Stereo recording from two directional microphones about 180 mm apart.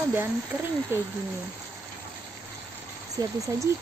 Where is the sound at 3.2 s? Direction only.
20° right (ahead or behind).